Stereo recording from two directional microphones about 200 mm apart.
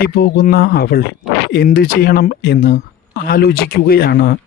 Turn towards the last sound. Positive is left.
turn(degrees=50)  # may be behind; listen again after turning